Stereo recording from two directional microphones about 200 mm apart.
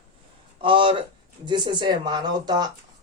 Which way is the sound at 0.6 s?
25° right (ahead or behind).